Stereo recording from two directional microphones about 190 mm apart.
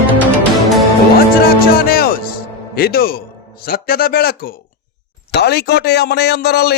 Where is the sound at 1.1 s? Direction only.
50° left (ahead or behind).